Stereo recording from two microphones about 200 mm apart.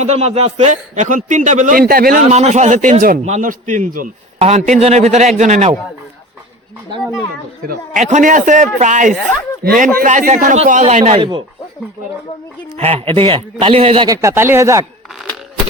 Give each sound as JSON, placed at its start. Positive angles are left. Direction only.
{"t": 0.0, "sound": "a man's voice", "side_deg": -35}
{"t": 2.2, "sound": "a man's voice", "side_deg": -35}
{"t": 7.7, "sound": "a man's voice", "side_deg": -40}
{"t": 12.7, "sound": "speech", "side_deg": -30}